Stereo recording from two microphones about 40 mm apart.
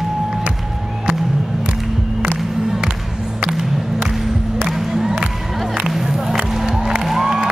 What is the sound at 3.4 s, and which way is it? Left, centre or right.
Music, centre.